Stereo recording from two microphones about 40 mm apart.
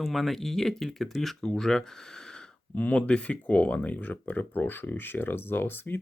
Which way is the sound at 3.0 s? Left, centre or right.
Left.